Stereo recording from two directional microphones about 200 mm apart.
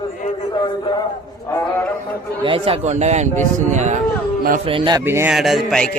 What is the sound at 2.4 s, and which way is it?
Speech, 25° right (ahead or behind).